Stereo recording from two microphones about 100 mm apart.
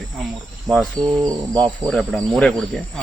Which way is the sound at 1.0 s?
45° right (ahead or behind).